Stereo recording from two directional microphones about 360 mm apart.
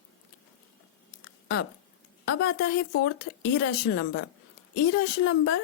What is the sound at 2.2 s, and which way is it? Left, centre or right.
A woman's voice, left.